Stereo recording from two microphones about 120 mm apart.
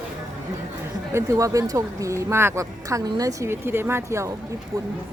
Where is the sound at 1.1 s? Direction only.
25° right (ahead or behind).